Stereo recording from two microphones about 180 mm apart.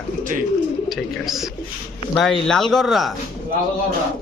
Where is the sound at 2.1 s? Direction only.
Centre (ahead or behind).